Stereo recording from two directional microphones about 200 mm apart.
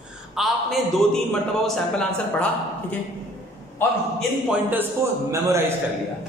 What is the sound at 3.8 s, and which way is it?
Speech, 10° left (ahead or behind).